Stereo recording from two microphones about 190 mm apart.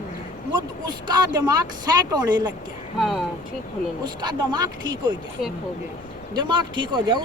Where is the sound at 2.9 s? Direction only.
Centre (ahead or behind).